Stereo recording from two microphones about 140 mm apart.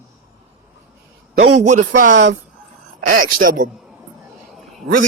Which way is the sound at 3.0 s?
80° right.